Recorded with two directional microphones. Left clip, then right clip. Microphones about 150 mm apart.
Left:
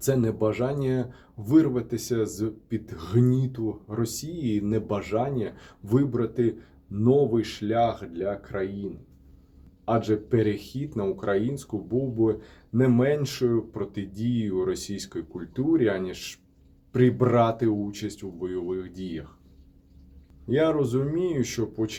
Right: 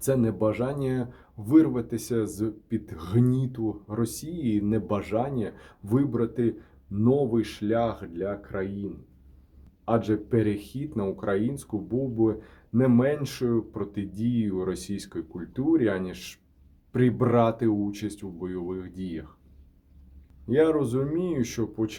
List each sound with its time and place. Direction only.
0.0 s speech: 25° right (ahead or behind)
9.8 s speech: 20° right (ahead or behind)
20.5 s speech: 25° right (ahead or behind)